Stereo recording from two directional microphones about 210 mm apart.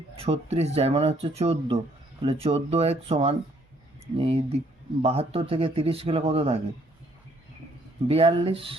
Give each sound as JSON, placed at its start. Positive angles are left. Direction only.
{"t": 0.2, "sound": "a man's voice", "side_deg": -30}
{"t": 8.0, "sound": "a man's voice", "side_deg": -25}